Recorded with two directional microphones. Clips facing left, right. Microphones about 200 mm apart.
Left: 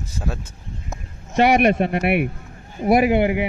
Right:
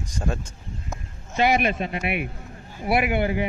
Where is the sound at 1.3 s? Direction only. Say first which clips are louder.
Left 6 dB; 65° left (ahead or behind).